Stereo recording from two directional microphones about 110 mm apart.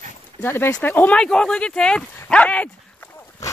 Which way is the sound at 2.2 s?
10° left (ahead or behind).